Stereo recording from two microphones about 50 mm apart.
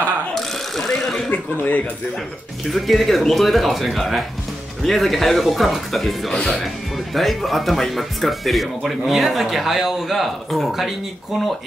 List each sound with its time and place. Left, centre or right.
0.3 s a sound: centre
1.3 s speech: left
2.7 s speech: centre
6.3 s speech: centre
7.2 s speech: centre